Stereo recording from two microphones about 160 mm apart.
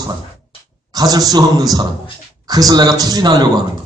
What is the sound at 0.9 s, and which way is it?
A man's voice, 25° right (ahead or behind).